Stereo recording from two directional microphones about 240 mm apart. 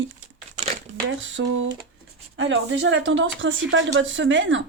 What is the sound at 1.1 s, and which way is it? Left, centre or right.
Speech, right.